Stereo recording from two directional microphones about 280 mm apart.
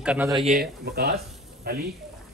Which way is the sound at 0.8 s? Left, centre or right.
Right.